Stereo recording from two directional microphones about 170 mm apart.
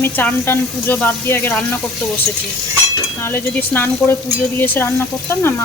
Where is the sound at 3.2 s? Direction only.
15° left (ahead or behind).